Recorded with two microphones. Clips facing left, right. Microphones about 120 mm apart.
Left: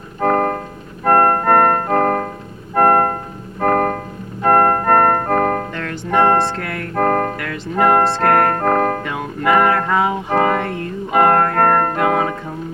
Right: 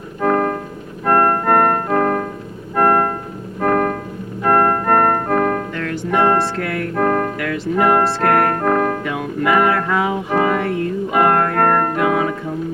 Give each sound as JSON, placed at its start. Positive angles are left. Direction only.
{"t": 0.2, "sound": "keyboard", "side_deg": 50}
{"t": 8.2, "sound": "music", "side_deg": 35}